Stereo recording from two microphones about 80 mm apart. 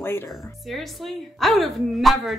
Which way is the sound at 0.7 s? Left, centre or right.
Centre.